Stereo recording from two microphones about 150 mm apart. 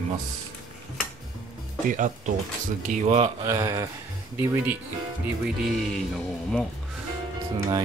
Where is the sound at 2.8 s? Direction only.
50° right (ahead or behind).